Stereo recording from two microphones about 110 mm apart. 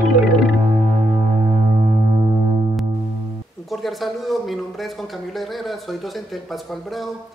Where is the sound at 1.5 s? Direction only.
65° right (ahead or behind).